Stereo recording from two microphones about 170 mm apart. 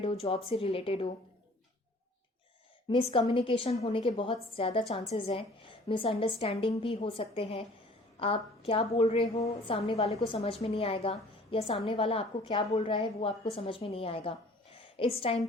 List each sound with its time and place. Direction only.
0.0 s a woman's voice: 35° left (ahead or behind)
2.9 s a woman's voice: 30° left (ahead or behind)